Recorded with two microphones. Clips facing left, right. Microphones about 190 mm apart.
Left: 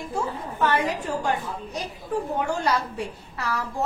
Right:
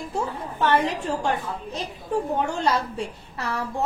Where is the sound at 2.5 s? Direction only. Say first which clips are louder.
Right 1 dB; 25° right (ahead or behind).